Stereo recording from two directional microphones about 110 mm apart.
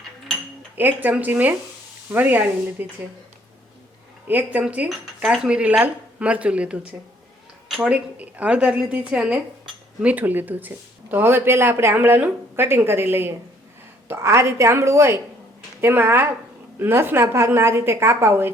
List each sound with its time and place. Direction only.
0.8 s speech: 15° right (ahead or behind)
4.3 s speech: 15° right (ahead or behind)
7.8 s speech: 15° right (ahead or behind)